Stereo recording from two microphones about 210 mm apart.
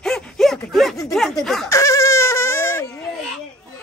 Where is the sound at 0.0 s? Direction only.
Centre (ahead or behind).